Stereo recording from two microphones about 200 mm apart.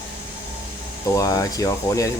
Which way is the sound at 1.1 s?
15° left (ahead or behind).